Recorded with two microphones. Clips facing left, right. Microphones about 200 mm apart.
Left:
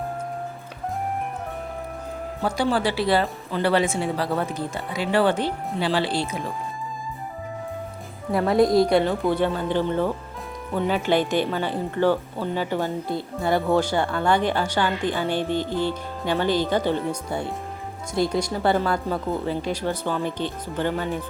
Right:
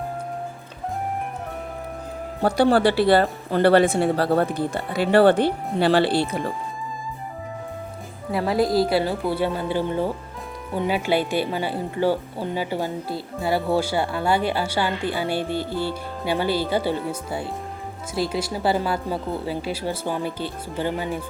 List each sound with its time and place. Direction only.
2.4 s speech: 60° right (ahead or behind)
8.5 s speech: 5° right (ahead or behind)